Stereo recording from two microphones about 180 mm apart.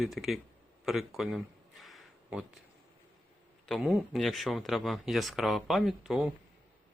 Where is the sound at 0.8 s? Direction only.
Centre (ahead or behind).